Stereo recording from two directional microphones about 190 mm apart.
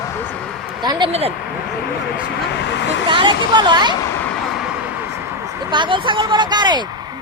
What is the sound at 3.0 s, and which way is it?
Speech, 25° right (ahead or behind).